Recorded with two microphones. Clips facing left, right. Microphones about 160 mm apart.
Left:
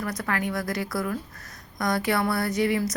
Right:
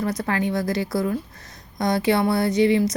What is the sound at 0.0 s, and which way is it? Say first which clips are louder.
A woman's voice: right 5 dB; 25° right (ahead or behind).